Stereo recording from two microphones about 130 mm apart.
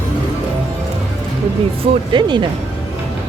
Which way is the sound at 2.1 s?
35° right (ahead or behind).